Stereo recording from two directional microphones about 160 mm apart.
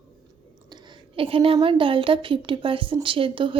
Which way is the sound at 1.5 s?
35° right (ahead or behind).